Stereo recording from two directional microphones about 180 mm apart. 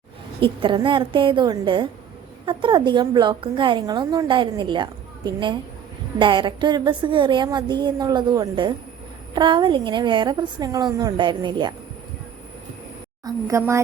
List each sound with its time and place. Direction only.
0.3 s a woman's voice: 30° right (ahead or behind)
13.2 s a woman's voice: 15° right (ahead or behind)